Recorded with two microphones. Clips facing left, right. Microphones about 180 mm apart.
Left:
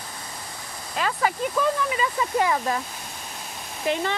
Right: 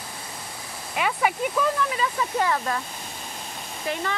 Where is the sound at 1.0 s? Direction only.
10° right (ahead or behind).